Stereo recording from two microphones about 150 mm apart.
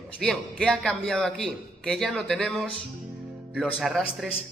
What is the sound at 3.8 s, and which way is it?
Speech, centre (ahead or behind).